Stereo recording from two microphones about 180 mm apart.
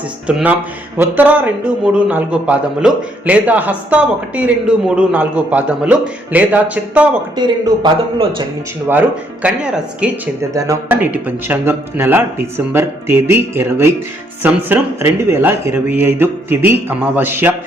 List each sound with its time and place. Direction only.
0.3 s a man's voice: 5° right (ahead or behind)
7.3 s speech: 25° right (ahead or behind)
9.4 s speech: 5° right (ahead or behind)
10.5 s a man's voice: 20° right (ahead or behind)